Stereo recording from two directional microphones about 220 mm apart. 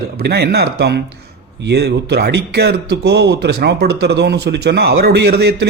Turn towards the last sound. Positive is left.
turn(degrees=-50)  # may be behind; listen again after turning